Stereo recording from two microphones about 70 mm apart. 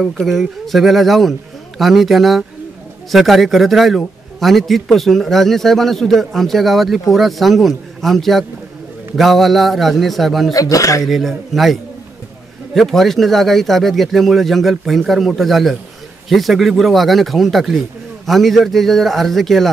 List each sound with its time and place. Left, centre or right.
0.0 s a man's voice: centre
10.5 s speech: left
11.1 s a man's voice: centre